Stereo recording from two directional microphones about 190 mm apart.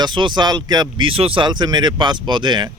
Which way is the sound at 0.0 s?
25° right (ahead or behind).